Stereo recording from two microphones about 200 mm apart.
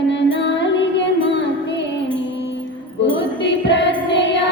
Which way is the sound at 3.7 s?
65° left (ahead or behind).